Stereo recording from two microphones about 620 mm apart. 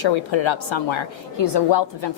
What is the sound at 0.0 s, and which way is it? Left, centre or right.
A woman's voice, left.